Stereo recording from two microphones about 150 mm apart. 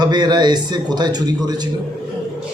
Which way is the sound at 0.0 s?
30° right (ahead or behind).